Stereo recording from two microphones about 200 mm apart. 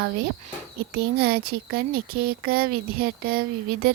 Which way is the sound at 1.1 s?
50° right (ahead or behind).